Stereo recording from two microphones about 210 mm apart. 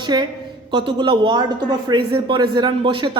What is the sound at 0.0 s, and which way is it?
A woman's voice, 20° right (ahead or behind).